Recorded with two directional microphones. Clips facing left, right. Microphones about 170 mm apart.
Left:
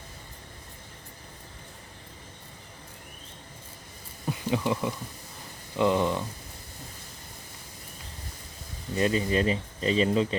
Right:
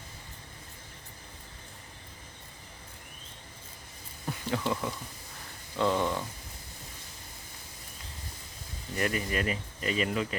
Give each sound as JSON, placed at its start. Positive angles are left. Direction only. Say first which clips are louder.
{"t": 4.3, "sound": "speech", "louder": "left 4 dB", "side_deg": 15}
{"t": 9.0, "sound": "speech", "louder": "left 6 dB", "side_deg": 25}